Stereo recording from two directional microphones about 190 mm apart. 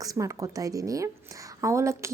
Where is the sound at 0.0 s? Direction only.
15° right (ahead or behind).